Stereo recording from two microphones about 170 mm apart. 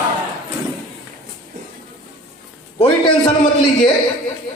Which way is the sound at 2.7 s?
30° left (ahead or behind).